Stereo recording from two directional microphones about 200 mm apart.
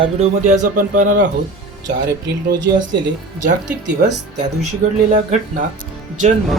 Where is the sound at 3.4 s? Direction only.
40° right (ahead or behind).